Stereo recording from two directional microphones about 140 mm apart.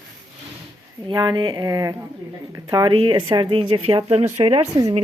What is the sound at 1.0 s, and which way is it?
A woman's voice, 30° right (ahead or behind).